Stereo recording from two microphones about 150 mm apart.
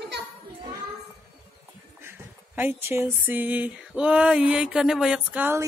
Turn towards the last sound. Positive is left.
turn(degrees=-15)  # may be behind; listen again after turning